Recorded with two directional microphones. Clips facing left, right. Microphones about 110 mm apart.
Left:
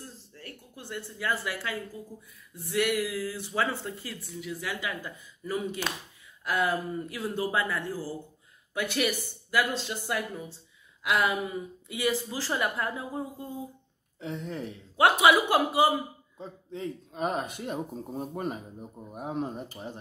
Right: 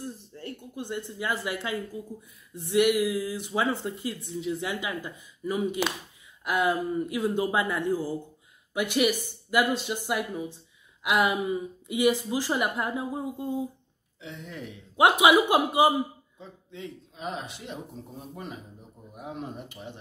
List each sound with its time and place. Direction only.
0.0 s a sound: 20° right (ahead or behind)
2.5 s a woman's voice: 20° right (ahead or behind)
14.2 s speech: 35° left (ahead or behind)
15.0 s a woman's voice: 15° right (ahead or behind)
16.3 s speech: 40° left (ahead or behind)